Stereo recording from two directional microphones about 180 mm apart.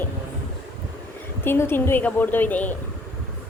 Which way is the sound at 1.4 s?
10° left (ahead or behind).